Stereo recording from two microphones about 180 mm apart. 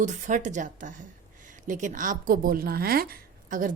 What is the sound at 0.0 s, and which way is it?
A woman's voice, 45° right (ahead or behind).